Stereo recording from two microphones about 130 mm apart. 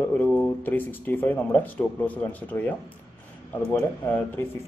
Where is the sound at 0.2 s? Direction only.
10° left (ahead or behind).